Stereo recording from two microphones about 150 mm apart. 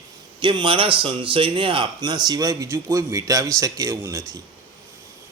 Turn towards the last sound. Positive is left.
turn(degrees=-20)  # may be behind; listen again after turning